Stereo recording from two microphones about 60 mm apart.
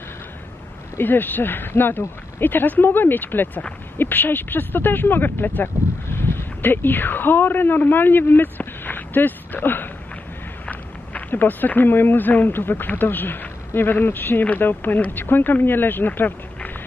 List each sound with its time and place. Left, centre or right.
0.9 s speech: left